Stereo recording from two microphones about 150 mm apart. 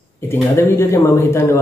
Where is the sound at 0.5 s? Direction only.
15° left (ahead or behind).